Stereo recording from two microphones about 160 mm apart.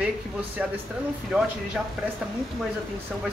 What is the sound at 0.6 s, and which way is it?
Speech, 5° right (ahead or behind).